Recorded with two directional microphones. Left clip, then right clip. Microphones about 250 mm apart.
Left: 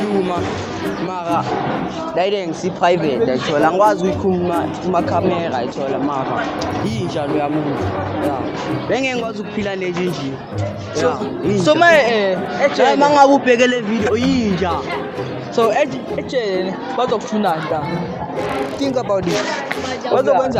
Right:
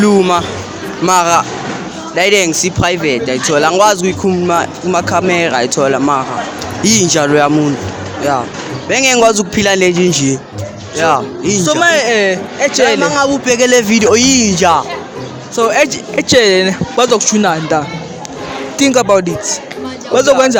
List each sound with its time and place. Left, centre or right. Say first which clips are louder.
0.2 s speech: right 8 dB; right
8.9 s speech: right 12 dB; right
11.6 s speech: even; centre
11.9 s speech: right 3 dB; right
13.0 s a man's voice: left 2 dB; right
13.9 s speech: right 8 dB; right
15.5 s speech: right 5 dB; right
18.8 s speech: right 12 dB; right